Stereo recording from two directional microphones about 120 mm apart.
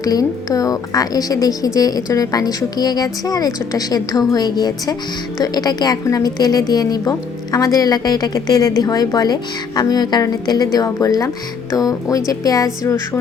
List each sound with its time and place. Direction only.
0.0 s a woman's voice: 30° left (ahead or behind)